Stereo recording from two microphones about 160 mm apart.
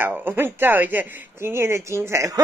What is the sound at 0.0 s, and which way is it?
Speech, 10° right (ahead or behind).